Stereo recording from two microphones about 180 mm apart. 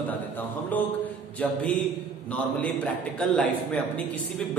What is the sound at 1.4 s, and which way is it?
Speech, 5° left (ahead or behind).